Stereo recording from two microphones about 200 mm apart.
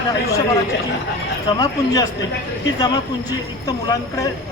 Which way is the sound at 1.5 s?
20° left (ahead or behind).